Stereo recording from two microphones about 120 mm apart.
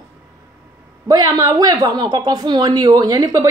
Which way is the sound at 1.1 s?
30° right (ahead or behind).